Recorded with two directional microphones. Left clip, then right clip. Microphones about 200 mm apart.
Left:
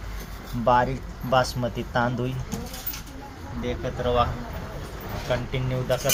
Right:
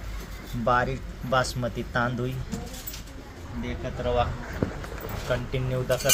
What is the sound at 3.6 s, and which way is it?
Speech, 20° left (ahead or behind).